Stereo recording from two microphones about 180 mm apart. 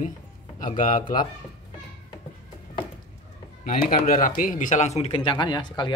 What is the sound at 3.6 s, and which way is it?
Speech, 45° left (ahead or behind).